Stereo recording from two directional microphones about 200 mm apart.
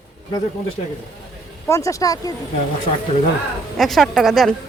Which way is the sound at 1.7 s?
15° left (ahead or behind).